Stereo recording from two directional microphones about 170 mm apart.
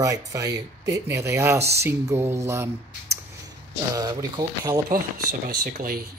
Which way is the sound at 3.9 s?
20° right (ahead or behind).